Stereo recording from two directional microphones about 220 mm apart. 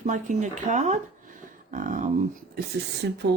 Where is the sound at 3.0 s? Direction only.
45° right (ahead or behind).